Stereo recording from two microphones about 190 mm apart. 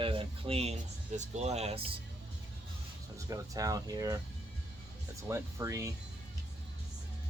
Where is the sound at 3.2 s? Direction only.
20° right (ahead or behind).